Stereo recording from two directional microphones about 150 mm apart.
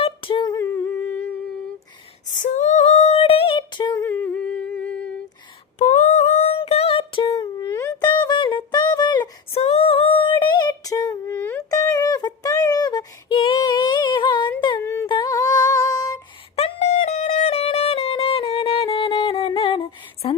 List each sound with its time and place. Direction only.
0.0 s humming: 35° left (ahead or behind); by 1.4 s 10° left (ahead or behind)
2.2 s female singing: 55° left (ahead or behind); by 4.0 s 30° left (ahead or behind)
4.0 s humming: 10° left (ahead or behind)
5.8 s a sound: 50° left (ahead or behind); by 9.3 s 30° left (ahead or behind)
9.5 s female singing: 45° left (ahead or behind)
10.4 s a sound: 30° left (ahead or behind)
15.0 s music: 30° left (ahead or behind)
16.6 s music: 45° left (ahead or behind)